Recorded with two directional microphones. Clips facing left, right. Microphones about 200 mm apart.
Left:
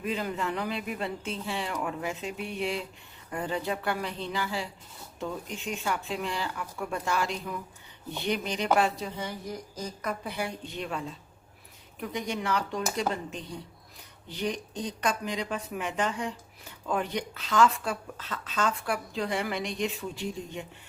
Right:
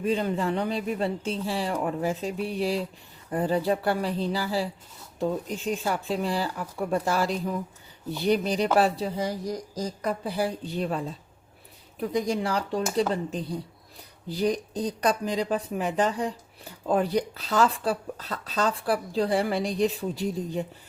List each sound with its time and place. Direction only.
0.0 s speech: 30° right (ahead or behind)